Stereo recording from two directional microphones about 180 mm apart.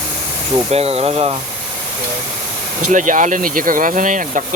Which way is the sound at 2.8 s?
45° right (ahead or behind).